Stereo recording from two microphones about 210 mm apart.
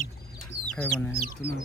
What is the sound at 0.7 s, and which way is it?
Speech, 10° left (ahead or behind).